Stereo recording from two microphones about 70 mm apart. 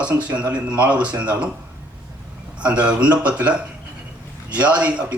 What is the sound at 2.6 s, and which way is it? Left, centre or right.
Speech, centre.